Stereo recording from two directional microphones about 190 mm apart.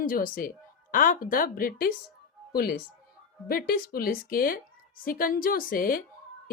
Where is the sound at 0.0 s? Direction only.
45° left (ahead or behind).